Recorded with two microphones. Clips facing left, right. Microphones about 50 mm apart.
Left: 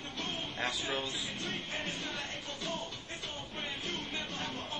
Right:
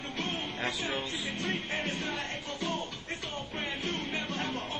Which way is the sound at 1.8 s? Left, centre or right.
Right.